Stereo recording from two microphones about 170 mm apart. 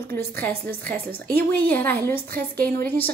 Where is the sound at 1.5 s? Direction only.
10° left (ahead or behind).